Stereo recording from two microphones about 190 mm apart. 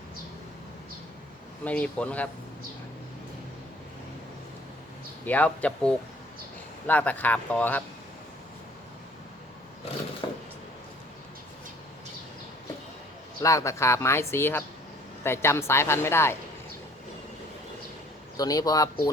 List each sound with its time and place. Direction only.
1.6 s speech: 5° left (ahead or behind)
5.2 s speech: 10° left (ahead or behind)
10.2 s a sound: 25° left (ahead or behind)
13.4 s speech: 15° left (ahead or behind)
18.3 s speech: 20° left (ahead or behind)